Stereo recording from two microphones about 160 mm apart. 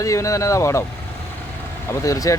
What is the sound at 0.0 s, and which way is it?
Speech, 20° left (ahead or behind).